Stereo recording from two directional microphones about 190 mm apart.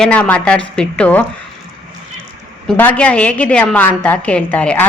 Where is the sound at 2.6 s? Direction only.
10° left (ahead or behind).